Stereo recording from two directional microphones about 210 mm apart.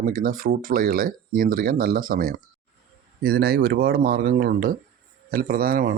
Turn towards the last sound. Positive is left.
turn(degrees=-45)  # may be behind; listen again after turning